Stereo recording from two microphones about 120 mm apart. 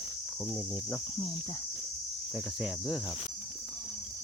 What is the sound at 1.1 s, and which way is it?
Speech, 30° left (ahead or behind).